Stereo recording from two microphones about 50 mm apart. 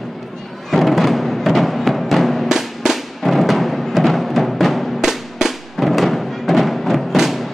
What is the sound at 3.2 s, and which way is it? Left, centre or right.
Music, centre.